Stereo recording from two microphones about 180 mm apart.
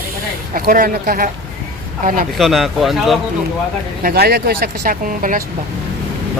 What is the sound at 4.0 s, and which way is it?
Speech, 55° right (ahead or behind).